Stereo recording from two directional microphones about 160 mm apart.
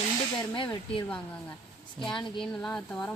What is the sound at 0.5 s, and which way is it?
Speech, 30° left (ahead or behind).